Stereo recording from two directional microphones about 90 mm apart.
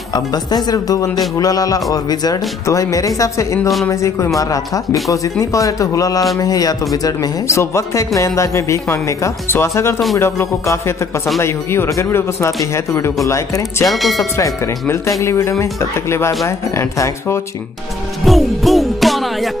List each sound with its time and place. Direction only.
0.1 s speech: 50° left (ahead or behind); by 13.8 s 30° left (ahead or behind)
13.8 s speech: centre (ahead or behind)
14.3 s speech: 35° left (ahead or behind)
18.2 s music: centre (ahead or behind)